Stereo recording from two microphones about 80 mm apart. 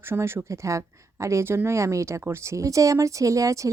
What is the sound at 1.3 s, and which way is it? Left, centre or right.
Speech, right.